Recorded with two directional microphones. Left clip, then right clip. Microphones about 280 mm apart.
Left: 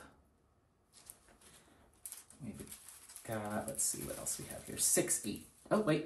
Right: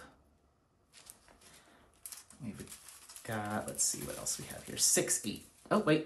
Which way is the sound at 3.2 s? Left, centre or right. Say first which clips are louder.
Right 3 dB; centre.